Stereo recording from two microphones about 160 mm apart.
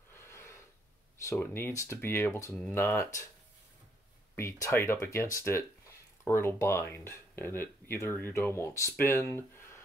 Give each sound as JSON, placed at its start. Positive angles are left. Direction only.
{"t": 0.1, "sound": "gasp", "side_deg": 15}
{"t": 1.2, "sound": "speech", "side_deg": 15}
{"t": 4.4, "sound": "speech", "side_deg": 15}